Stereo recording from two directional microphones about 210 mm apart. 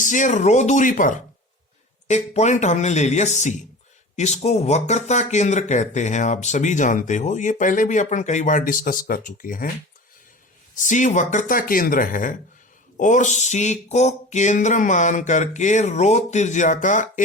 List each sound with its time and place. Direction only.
0.0 s speech: 35° left (ahead or behind)
10.8 s speech: 35° left (ahead or behind)